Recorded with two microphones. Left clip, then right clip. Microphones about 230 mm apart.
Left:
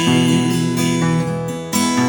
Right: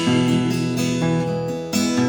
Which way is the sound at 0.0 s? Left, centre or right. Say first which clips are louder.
Left 4 dB; left.